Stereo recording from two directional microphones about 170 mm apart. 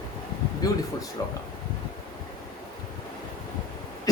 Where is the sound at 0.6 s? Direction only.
20° left (ahead or behind).